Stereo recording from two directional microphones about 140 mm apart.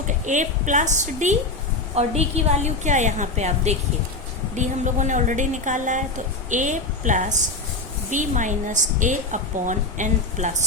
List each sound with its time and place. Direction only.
0.1 s a woman's voice: 60° right (ahead or behind)